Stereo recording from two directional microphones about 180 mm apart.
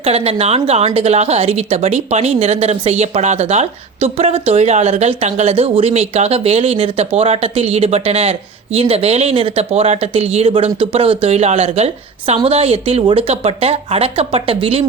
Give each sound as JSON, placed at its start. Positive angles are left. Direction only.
{"t": 0.0, "sound": "a woman's voice", "side_deg": -35}